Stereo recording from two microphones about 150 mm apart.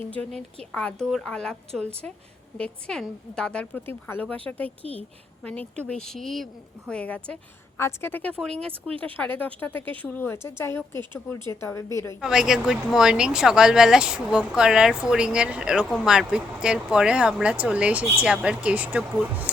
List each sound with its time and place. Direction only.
0.0 s speech: 10° left (ahead or behind)
12.2 s speech: 5° right (ahead or behind)